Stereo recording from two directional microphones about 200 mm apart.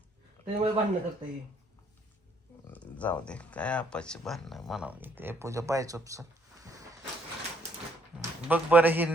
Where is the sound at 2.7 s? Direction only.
5° left (ahead or behind); by 6.2 s 15° right (ahead or behind).